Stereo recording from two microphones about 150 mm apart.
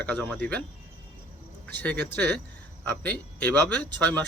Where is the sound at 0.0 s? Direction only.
10° left (ahead or behind).